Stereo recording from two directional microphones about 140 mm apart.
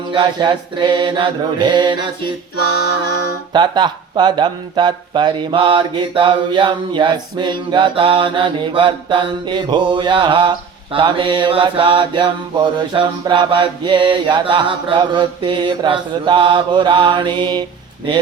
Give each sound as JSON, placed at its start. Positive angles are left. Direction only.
{"t": 0.1, "sound": "speech", "side_deg": -35}
{"t": 3.5, "sound": "speech", "side_deg": -30}